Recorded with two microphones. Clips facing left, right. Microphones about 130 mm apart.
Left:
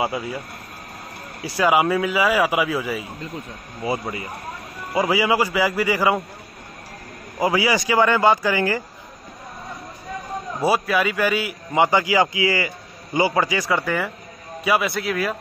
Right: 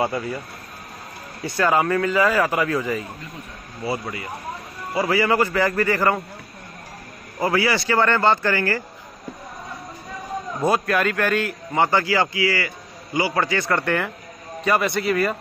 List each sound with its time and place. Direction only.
0.0 s a man's voice: 10° left (ahead or behind)
1.4 s a man's voice: 10° left (ahead or behind)
3.8 s a man's voice: 20° left (ahead or behind)
7.3 s a man's voice: 15° left (ahead or behind)
10.6 s a man's voice: 5° left (ahead or behind)